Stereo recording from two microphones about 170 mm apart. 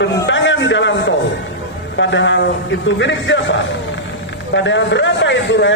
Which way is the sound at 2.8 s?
90° left.